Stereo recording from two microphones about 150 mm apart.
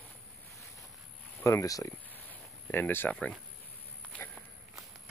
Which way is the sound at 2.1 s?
10° left (ahead or behind).